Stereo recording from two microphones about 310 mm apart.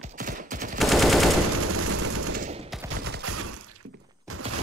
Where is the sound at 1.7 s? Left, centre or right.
Right.